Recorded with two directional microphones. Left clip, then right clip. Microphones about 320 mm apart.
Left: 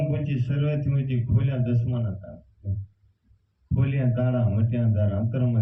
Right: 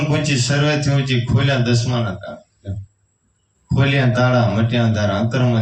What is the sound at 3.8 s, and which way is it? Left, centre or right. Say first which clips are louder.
A man's voice: right 12 dB; right.